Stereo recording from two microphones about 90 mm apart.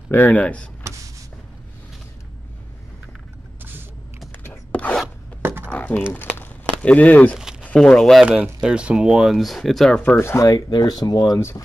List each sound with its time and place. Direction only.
0.1 s speech: 20° left (ahead or behind)
4.3 s a sound: 20° left (ahead or behind)
5.4 s a sound: 25° right (ahead or behind)
5.7 s a sound: 15° left (ahead or behind)
7.6 s speech: 10° left (ahead or behind)
8.3 s speech: 10° right (ahead or behind)
10.0 s speech: 30° left (ahead or behind)
10.7 s speech: 50° left (ahead or behind)
11.3 s speech: 35° left (ahead or behind)